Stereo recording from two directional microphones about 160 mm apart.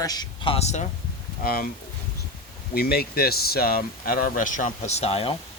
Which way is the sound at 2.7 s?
75° left (ahead or behind).